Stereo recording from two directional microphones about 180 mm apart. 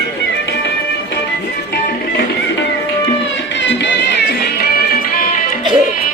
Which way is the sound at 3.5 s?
85° left.